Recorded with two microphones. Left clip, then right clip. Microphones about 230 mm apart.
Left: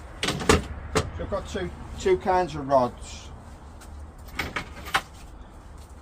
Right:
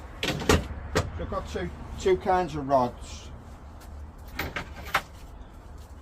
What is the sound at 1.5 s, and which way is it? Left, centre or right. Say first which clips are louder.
Speech: left 2 dB; centre.